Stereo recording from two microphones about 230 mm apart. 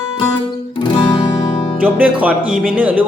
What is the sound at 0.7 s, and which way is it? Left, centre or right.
Music, centre.